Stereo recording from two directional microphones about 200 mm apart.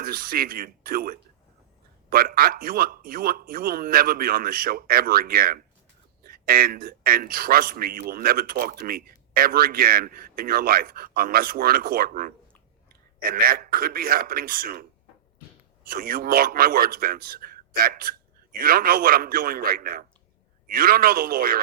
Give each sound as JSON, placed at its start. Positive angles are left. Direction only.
{"t": 0.0, "sound": "a man's voice", "side_deg": -45}